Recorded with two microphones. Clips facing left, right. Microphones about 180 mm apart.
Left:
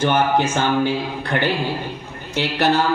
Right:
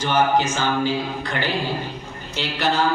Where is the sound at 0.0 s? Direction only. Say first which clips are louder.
Left 2 dB; 55° left (ahead or behind).